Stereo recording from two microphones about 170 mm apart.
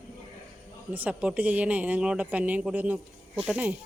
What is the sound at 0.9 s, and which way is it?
Speech, 10° right (ahead or behind).